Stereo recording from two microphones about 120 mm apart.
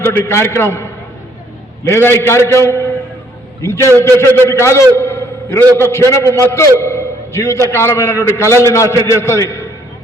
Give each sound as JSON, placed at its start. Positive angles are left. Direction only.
{"t": 0.0, "sound": "a man's voice", "side_deg": 20}